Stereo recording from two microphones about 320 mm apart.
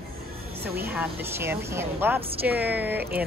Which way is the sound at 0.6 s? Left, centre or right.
Right.